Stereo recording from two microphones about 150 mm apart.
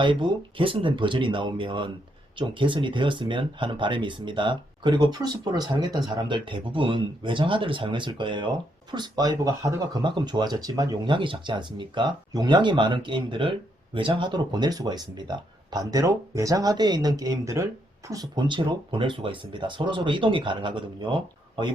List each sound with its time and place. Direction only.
0.0 s speech: 30° right (ahead or behind)